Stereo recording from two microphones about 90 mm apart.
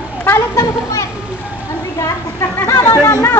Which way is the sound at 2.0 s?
35° left (ahead or behind).